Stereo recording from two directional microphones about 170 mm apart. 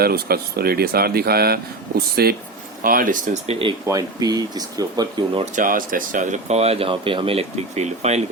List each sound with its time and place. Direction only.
0.0 s speech: 65° right (ahead or behind)
2.8 s speech: 55° right (ahead or behind); by 3.8 s 35° right (ahead or behind)
3.8 s speech: 20° right (ahead or behind)
5.5 s speech: 55° right (ahead or behind)